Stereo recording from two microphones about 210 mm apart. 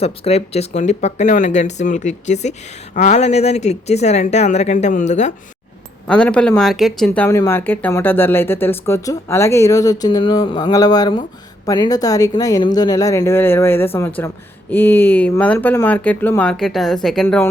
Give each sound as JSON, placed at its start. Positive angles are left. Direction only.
{"t": 0.0, "sound": "speech", "side_deg": 30}
{"t": 6.1, "sound": "speech", "side_deg": 5}